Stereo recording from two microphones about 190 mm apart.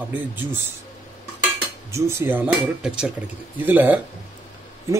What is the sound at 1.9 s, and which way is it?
Speech, 15° right (ahead or behind).